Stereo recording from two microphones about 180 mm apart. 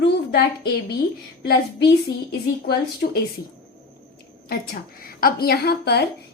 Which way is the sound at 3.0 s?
50° left (ahead or behind).